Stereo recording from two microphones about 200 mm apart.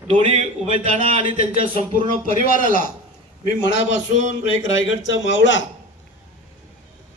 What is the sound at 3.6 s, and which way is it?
Speech, 70° left (ahead or behind).